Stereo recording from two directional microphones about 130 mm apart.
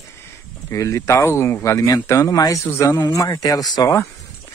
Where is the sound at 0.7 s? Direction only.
25° left (ahead or behind).